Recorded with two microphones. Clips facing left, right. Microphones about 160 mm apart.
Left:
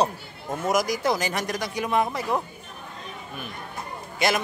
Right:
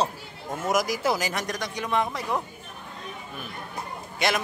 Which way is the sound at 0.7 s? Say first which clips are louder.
Left 1 dB; centre (ahead or behind).